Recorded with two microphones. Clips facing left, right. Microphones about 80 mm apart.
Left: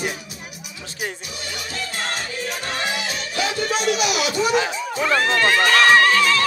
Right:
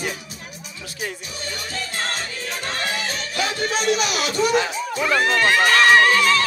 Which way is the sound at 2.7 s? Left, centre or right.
Centre.